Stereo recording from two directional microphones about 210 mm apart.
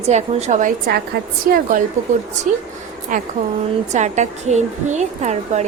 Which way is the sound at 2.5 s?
35° right (ahead or behind).